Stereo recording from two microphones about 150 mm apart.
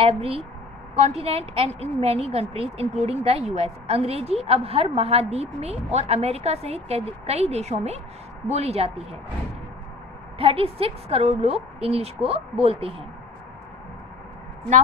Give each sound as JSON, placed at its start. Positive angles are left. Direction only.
{"t": 0.0, "sound": "a woman's voice", "side_deg": -40}
{"t": 10.4, "sound": "a woman's voice", "side_deg": -40}